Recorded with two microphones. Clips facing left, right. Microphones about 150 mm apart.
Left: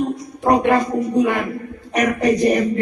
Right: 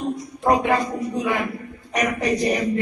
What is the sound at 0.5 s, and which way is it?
A woman's voice, 55° left (ahead or behind).